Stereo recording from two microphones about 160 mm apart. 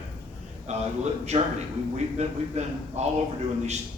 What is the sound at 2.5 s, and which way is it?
Speech, 45° right (ahead or behind).